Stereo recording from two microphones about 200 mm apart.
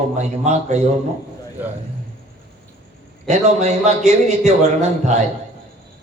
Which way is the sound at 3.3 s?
35° right (ahead or behind).